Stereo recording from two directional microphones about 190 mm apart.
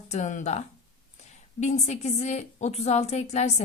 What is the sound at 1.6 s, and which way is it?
A woman's voice, 35° left (ahead or behind).